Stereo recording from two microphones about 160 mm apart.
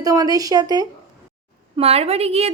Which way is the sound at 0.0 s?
20° right (ahead or behind).